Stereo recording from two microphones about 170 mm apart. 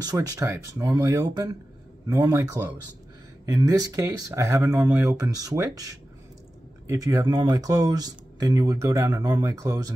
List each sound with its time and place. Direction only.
0.0 s speech: 20° right (ahead or behind)